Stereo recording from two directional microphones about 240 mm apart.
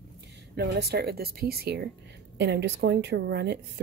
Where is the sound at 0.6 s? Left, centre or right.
Right.